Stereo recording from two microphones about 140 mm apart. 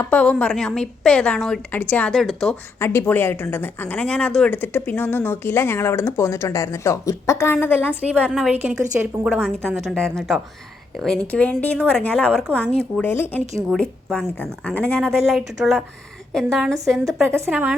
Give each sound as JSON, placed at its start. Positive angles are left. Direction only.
{"t": 0.0, "sound": "a woman's voice", "side_deg": 10}
{"t": 2.7, "sound": "speech", "side_deg": 15}
{"t": 8.3, "sound": "a woman's voice", "side_deg": -10}
{"t": 9.4, "sound": "a woman's voice", "side_deg": 5}
{"t": 13.0, "sound": "a woman's voice", "side_deg": 15}
{"t": 17.5, "sound": "a woman's voice", "side_deg": -10}